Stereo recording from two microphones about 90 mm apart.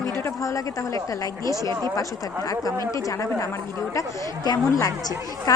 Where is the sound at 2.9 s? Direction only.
35° left (ahead or behind).